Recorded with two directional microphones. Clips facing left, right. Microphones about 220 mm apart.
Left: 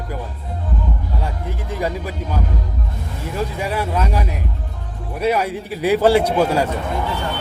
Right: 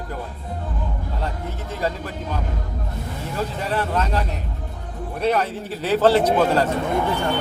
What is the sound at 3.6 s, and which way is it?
Speech, 10° left (ahead or behind).